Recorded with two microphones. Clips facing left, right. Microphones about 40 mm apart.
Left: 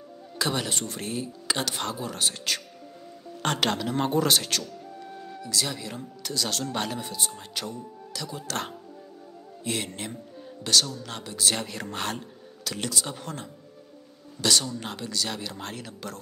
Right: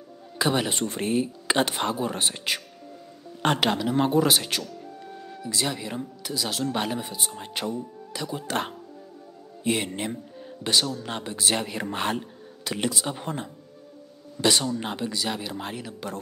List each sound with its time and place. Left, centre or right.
0.4 s speech: centre
4.6 s music: centre
5.5 s speech: centre
7.5 s speech: right
14.6 s speech: centre